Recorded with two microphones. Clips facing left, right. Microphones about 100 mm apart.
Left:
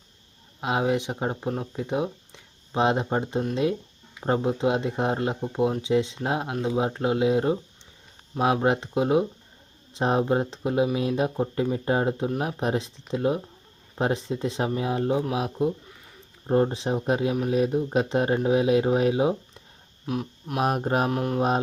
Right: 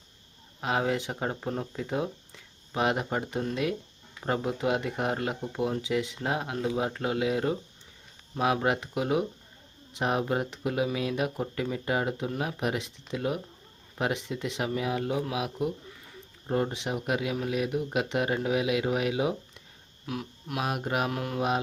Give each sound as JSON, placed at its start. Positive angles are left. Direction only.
{"t": 0.6, "sound": "speech", "side_deg": 20}
{"t": 20.7, "sound": "speech", "side_deg": 35}
{"t": 21.1, "sound": "speech", "side_deg": 25}